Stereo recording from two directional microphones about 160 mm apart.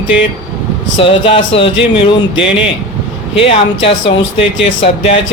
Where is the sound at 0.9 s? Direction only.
35° left (ahead or behind).